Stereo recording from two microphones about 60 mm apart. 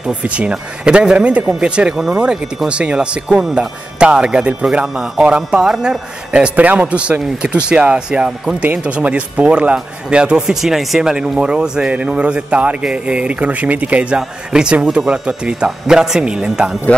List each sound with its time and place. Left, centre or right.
0.2 s a man's voice: centre
3.3 s a man's voice: centre